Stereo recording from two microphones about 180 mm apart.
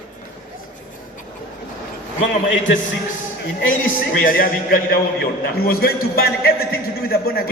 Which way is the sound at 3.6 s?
50° left (ahead or behind).